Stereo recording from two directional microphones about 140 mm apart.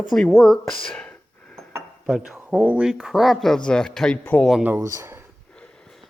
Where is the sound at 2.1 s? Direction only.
5° right (ahead or behind); by 4.4 s 10° left (ahead or behind).